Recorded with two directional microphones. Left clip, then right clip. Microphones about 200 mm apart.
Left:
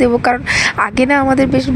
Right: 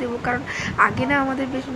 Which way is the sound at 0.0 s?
40° left (ahead or behind).